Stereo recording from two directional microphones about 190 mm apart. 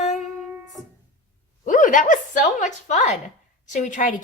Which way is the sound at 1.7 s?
45° left (ahead or behind).